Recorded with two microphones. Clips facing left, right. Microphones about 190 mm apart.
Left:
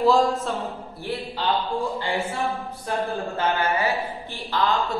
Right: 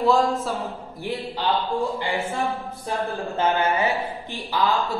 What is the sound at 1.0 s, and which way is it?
Speech, 20° right (ahead or behind).